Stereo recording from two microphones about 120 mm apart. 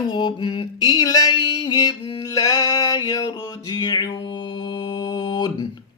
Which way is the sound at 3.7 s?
35° left (ahead or behind).